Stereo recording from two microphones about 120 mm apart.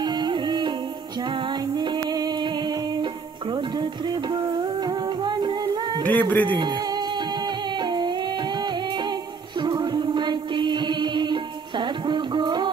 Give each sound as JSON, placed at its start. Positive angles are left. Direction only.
{"t": 0.0, "sound": "music", "side_deg": -35}
{"t": 6.0, "sound": "speech", "side_deg": 10}
{"t": 6.5, "sound": "music", "side_deg": -40}